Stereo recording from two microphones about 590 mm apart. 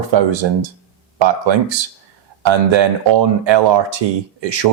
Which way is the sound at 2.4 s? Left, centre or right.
Right.